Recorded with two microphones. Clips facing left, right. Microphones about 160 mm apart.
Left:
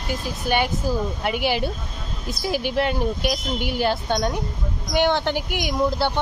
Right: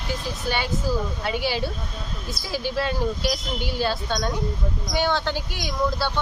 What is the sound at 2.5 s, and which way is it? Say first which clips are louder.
Speech: left 3 dB; 15° left (ahead or behind).